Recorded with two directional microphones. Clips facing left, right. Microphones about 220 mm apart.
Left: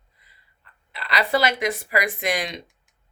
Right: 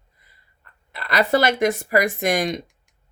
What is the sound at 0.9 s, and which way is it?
Speech, 45° right (ahead or behind).